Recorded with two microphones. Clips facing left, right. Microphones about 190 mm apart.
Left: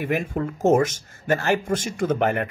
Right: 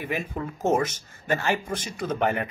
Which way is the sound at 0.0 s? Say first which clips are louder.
Left 6 dB; 50° left (ahead or behind).